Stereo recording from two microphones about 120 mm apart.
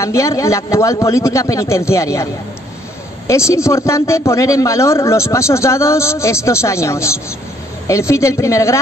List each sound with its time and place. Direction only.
0.0 s a man's voice: 25° left (ahead or behind)
3.3 s a man's voice: 25° left (ahead or behind)